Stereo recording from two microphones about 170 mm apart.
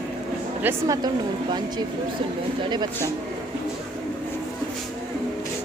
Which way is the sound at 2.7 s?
25° right (ahead or behind).